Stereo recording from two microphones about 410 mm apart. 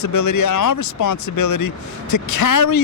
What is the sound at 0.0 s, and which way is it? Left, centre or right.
Speech, left.